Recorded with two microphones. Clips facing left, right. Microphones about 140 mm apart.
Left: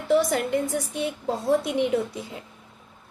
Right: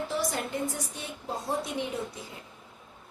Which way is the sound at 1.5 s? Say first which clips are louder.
Left 10 dB; 70° left (ahead or behind).